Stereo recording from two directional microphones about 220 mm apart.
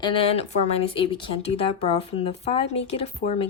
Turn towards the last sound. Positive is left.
turn(degrees=30)  # may be behind; listen again after turning